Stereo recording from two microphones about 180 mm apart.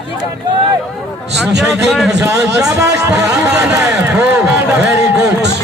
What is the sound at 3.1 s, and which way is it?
A man's voice, 20° right (ahead or behind).